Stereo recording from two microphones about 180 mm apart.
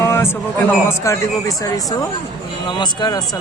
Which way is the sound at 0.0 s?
15° left (ahead or behind).